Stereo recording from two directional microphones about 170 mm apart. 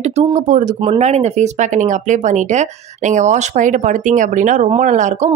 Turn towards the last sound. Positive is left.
turn(degrees=-45)  # may be behind; listen again after turning